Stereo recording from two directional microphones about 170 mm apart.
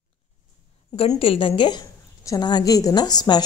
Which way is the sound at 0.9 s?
35° left (ahead or behind).